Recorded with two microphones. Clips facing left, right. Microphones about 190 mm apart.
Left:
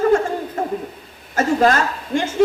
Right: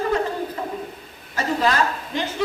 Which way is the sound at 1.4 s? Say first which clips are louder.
Left 5 dB; 50° left (ahead or behind).